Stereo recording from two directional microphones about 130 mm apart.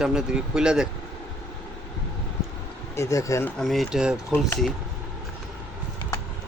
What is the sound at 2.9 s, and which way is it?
Speech, 25° left (ahead or behind).